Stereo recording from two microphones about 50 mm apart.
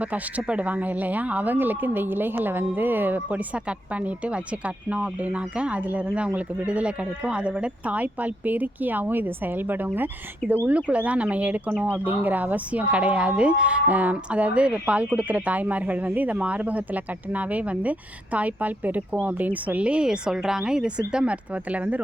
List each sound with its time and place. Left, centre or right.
0.0 s speech: right
10.7 s speech: right
20.1 s speech: centre
21.5 s speech: right